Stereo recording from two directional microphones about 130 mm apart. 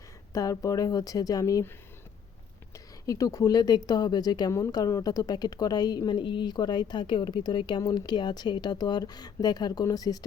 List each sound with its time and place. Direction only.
0.3 s speech: 25° left (ahead or behind)
2.7 s a woman's voice: 25° left (ahead or behind)